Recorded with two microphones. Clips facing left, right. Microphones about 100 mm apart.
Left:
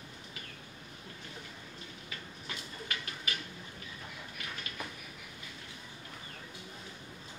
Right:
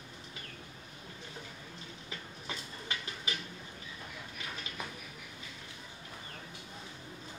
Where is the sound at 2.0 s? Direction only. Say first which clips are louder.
Right 3 dB; 25° right (ahead or behind).